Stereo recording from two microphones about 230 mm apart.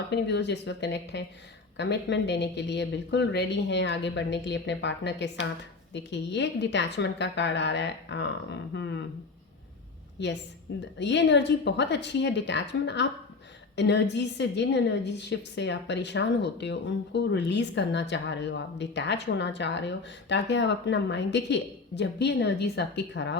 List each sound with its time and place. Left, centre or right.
0.1 s a woman's voice: left
10.2 s a woman's voice: left